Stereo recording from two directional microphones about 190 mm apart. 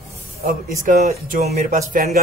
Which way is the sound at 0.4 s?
45° right (ahead or behind).